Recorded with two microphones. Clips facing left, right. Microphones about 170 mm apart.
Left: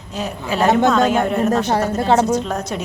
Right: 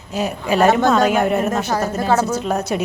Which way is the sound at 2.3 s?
10° right (ahead or behind).